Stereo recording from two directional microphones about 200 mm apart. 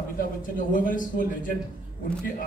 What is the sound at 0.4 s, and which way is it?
A man's voice, 40° left (ahead or behind).